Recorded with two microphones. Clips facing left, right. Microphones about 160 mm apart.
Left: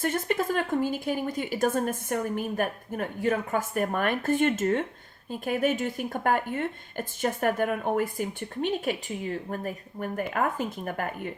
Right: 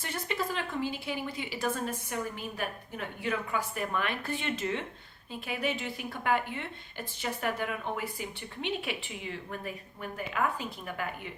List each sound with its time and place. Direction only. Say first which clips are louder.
0.0 s speech: left 8 dB; 50° left (ahead or behind)